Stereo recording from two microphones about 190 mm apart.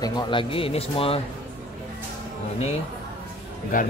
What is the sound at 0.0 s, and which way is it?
Speech, 25° left (ahead or behind).